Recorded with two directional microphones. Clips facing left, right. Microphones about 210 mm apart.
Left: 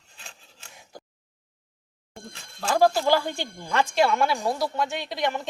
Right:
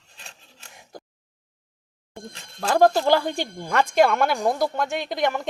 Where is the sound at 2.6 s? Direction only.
45° right (ahead or behind).